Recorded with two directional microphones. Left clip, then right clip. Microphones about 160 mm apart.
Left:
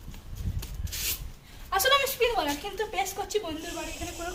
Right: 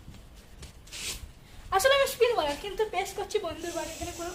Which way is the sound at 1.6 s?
30° right (ahead or behind).